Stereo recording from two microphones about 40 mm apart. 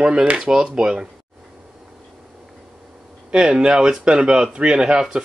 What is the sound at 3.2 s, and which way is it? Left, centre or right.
Speech, right.